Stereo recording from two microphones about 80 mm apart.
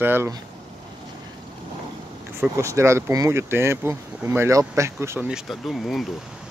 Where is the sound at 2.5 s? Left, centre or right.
Right.